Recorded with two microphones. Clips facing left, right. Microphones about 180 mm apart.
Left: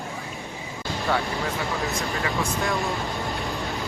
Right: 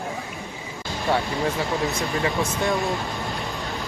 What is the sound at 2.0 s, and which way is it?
Speech, 15° right (ahead or behind).